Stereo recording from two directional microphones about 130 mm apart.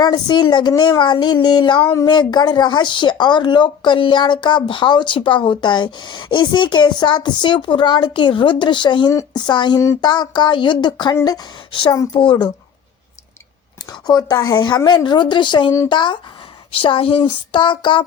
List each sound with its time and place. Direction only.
0.0 s speech: 35° left (ahead or behind)
1.8 s speech: 20° left (ahead or behind)
2.0 s speech: 35° left (ahead or behind)
13.9 s speech: 30° left (ahead or behind)